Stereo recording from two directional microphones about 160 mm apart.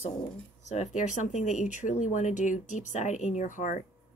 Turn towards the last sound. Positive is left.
turn(degrees=55)  # may be behind; listen again after turning